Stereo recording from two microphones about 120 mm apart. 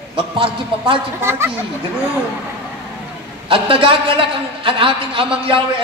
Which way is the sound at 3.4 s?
45° right (ahead or behind).